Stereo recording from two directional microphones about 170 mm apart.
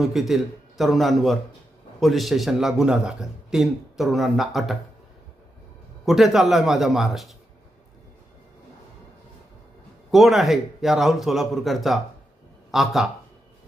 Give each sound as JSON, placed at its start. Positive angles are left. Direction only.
{"t": 0.0, "sound": "a man's voice", "side_deg": 0}
{"t": 6.1, "sound": "a man's voice", "side_deg": 0}
{"t": 10.1, "sound": "a man's voice", "side_deg": 0}